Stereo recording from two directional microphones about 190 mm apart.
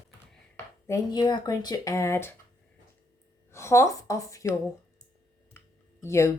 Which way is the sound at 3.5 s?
15° left (ahead or behind).